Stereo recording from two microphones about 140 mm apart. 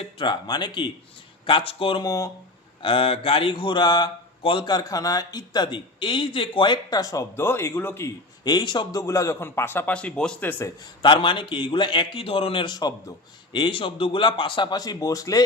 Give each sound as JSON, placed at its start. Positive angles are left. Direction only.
{"t": 0.0, "sound": "speech", "side_deg": 35}
{"t": 2.0, "sound": "speech", "side_deg": 20}
{"t": 2.8, "sound": "speech", "side_deg": 40}
{"t": 8.5, "sound": "speech", "side_deg": 30}
{"t": 11.0, "sound": "speech", "side_deg": 35}